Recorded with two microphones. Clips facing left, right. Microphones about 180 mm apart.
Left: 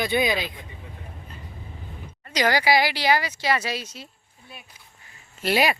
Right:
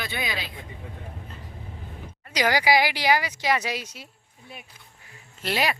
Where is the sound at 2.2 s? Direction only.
10° right (ahead or behind).